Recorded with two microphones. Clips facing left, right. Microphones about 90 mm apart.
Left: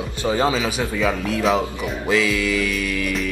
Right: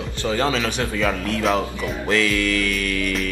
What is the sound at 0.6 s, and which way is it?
Speech, 5° left (ahead or behind).